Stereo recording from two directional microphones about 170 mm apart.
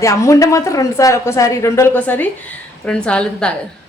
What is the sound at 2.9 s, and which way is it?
Cutlery, 5° left (ahead or behind).